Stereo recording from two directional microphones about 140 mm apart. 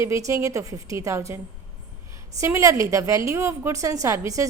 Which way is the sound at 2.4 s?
20° right (ahead or behind).